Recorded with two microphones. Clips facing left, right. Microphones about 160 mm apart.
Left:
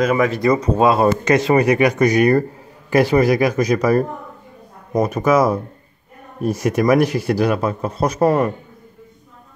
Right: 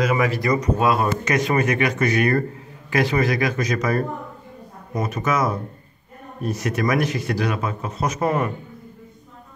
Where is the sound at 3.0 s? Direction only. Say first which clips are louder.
Left 6 dB; 10° left (ahead or behind).